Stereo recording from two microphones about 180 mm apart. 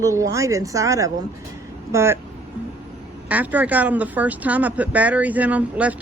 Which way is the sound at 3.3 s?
10° right (ahead or behind).